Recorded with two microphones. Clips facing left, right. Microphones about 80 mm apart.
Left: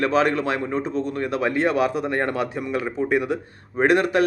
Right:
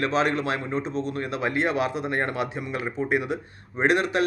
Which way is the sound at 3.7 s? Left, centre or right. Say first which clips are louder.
Left 4 dB; left.